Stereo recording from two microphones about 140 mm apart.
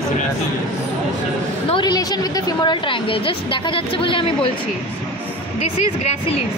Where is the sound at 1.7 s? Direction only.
30° left (ahead or behind).